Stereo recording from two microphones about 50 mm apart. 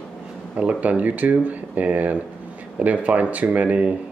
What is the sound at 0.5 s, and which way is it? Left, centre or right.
Speech, right.